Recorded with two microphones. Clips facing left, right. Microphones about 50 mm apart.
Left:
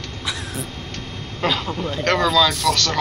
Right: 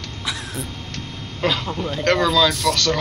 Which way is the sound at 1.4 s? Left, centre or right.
Centre.